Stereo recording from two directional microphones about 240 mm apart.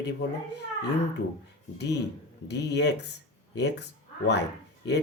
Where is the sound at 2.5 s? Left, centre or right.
Left.